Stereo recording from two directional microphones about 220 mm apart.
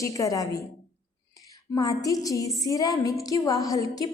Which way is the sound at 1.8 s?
15° left (ahead or behind).